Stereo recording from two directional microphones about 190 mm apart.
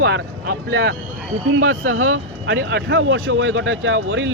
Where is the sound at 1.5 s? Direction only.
85° right.